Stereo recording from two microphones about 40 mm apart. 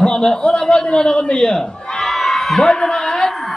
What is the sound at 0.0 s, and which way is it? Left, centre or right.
A man's voice, left.